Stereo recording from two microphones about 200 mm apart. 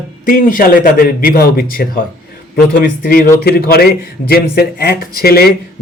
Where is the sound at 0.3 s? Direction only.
45° left (ahead or behind).